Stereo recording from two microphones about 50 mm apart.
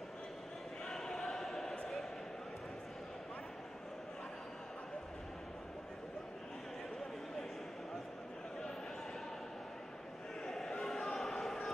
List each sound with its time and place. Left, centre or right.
0.8 s choir: centre
10.4 s basketball bounce: centre